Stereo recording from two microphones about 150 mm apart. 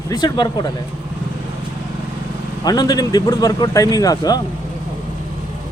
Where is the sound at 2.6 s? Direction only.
25° left (ahead or behind).